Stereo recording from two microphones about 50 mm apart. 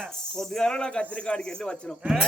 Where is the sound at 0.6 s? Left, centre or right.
Centre.